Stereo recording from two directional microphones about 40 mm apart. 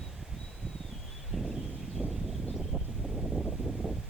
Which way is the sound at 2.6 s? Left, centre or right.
Centre.